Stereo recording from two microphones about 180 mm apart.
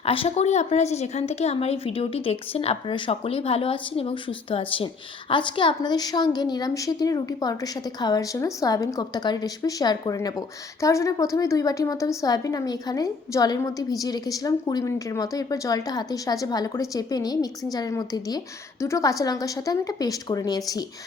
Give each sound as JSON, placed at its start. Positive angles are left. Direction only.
{"t": 0.0, "sound": "a woman's voice", "side_deg": 30}